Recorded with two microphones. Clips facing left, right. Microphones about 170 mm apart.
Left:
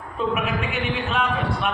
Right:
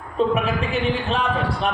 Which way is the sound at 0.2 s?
35° right (ahead or behind).